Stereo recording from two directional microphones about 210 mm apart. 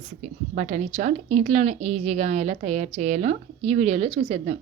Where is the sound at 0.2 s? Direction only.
35° right (ahead or behind).